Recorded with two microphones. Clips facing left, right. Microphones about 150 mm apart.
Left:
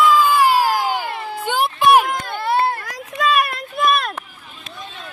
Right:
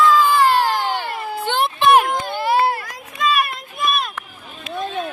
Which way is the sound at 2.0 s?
Centre (ahead or behind).